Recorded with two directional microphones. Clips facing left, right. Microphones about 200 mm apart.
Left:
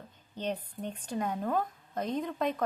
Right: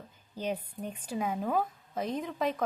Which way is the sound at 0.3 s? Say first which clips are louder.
Right 1 dB; 10° right (ahead or behind).